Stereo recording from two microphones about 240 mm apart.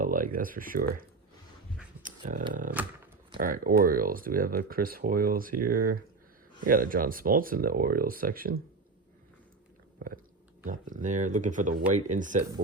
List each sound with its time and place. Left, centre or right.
0.0 s speech: right
2.5 s speech: right
10.6 s speech: right